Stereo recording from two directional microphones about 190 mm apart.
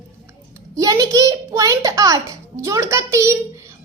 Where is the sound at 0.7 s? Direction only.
20° right (ahead or behind).